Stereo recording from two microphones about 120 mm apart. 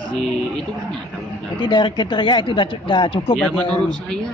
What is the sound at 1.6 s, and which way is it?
Speech, 40° left (ahead or behind).